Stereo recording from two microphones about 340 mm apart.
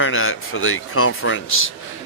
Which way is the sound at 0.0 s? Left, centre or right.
Left.